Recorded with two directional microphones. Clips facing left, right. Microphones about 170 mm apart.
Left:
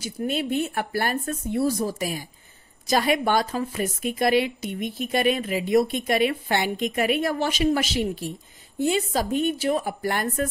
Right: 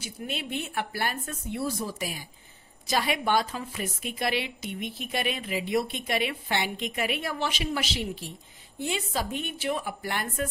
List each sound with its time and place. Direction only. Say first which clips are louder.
0.0 s a woman's voice: left 9 dB; 40° left (ahead or behind)